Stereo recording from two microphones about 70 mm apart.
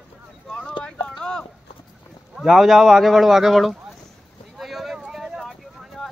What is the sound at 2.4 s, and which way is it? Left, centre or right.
Speech, centre.